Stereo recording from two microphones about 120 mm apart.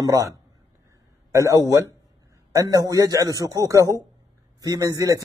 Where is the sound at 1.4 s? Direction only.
30° right (ahead or behind).